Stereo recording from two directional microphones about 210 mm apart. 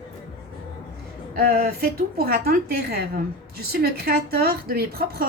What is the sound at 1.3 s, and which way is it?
Speech, 45° right (ahead or behind).